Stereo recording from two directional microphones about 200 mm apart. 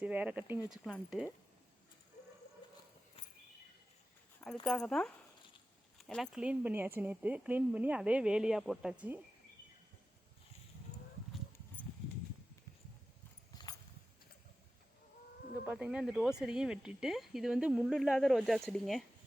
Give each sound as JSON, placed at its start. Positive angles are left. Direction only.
{"t": 0.0, "sound": "speech", "side_deg": -5}
{"t": 4.6, "sound": "speech", "side_deg": 0}
{"t": 13.5, "sound": "a sound", "side_deg": 20}
{"t": 15.6, "sound": "speech", "side_deg": -5}